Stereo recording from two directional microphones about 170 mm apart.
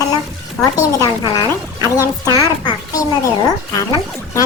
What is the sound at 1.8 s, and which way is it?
A woman's voice, 20° left (ahead or behind).